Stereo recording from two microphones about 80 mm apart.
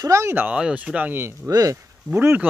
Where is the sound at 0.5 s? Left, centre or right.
Centre.